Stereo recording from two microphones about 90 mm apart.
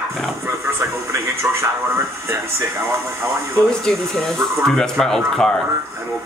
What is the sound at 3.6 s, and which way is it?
Speech, 5° left (ahead or behind).